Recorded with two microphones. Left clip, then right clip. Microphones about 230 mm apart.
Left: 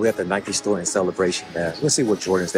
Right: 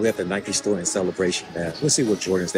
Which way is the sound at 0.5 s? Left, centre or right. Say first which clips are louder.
Left 1 dB; centre.